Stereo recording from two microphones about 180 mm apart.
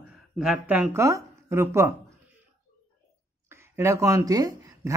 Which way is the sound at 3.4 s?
15° right (ahead or behind).